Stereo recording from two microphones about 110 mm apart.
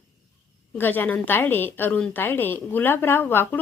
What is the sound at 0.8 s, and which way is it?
A woman's voice, 15° left (ahead or behind).